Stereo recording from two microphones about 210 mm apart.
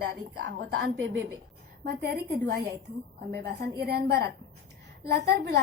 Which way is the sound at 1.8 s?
45° right (ahead or behind).